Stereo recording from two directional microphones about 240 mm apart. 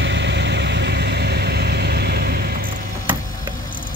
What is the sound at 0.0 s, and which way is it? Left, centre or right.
Vehicle, right.